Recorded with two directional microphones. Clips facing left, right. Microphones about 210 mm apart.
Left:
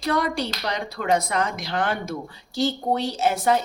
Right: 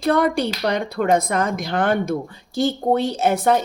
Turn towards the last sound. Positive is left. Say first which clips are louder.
# right 3 dB
turn(degrees=-55)  # may be behind; listen again after turning